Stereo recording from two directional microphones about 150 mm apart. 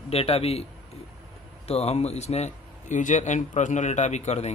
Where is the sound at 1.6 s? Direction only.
45° left (ahead or behind).